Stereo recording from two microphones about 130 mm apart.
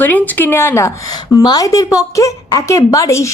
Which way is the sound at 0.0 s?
15° left (ahead or behind).